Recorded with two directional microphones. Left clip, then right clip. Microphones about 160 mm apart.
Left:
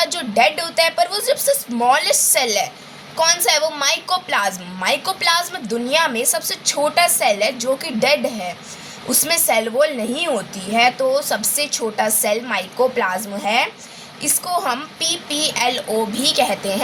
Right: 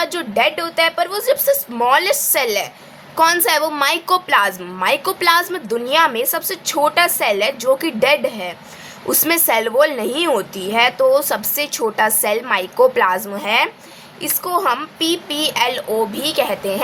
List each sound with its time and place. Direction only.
0.0 s a woman's voice: 20° right (ahead or behind)